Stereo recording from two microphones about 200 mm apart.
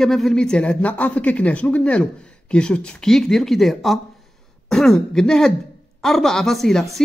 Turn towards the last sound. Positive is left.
turn(degrees=0)  # may be behind; listen again after turning